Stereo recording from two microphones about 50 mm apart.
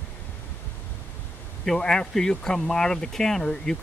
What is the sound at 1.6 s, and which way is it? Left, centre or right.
Speech, centre.